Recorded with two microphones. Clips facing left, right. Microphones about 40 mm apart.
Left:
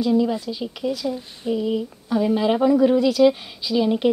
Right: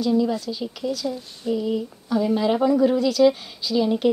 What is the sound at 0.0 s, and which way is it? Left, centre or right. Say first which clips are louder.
A woman's voice: left 1 dB; centre.